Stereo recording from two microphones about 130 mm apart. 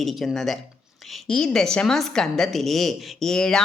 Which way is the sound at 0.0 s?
Centre (ahead or behind).